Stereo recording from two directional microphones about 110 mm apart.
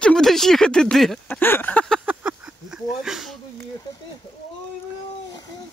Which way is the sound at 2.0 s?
10° right (ahead or behind).